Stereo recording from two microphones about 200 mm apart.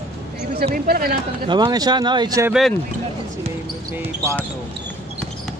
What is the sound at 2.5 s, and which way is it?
Speech, centre (ahead or behind).